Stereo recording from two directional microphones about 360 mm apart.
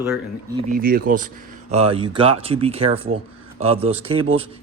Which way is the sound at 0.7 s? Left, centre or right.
Right.